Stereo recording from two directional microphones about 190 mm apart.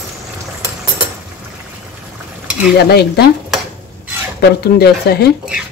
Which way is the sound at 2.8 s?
60° left (ahead or behind).